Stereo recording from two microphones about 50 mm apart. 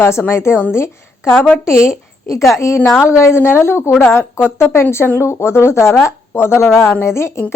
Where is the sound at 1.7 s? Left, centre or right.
Left.